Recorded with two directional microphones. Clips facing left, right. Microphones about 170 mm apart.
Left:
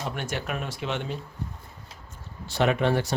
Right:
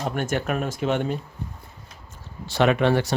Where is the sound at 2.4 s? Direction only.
90° right.